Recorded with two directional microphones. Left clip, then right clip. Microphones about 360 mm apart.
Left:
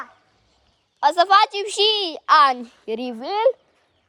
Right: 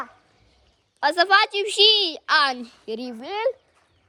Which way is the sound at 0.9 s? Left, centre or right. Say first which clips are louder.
Left 3 dB; centre.